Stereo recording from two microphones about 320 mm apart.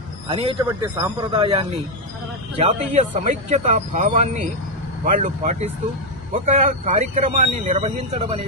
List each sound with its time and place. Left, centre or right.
0.3 s speech: centre